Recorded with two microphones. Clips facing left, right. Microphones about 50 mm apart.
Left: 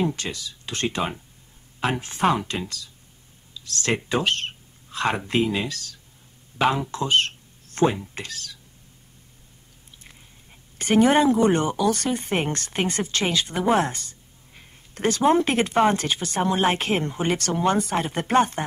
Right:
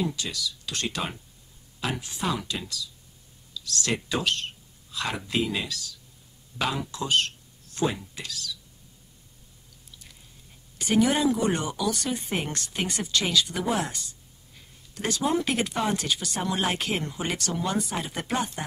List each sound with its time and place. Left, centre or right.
0.0 s speech: left
1.8 s speech: left
5.7 s speech: left
6.9 s a sound: left
8.1 s speech: left
10.8 s speech: left